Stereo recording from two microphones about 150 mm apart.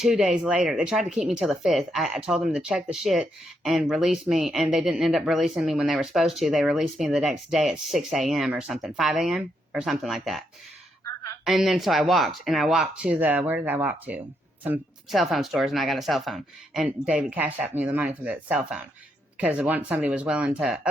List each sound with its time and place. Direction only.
0.0 s speech: 5° right (ahead or behind)
11.0 s a sound: 20° left (ahead or behind)
11.4 s speech: centre (ahead or behind)
15.1 s speech: centre (ahead or behind)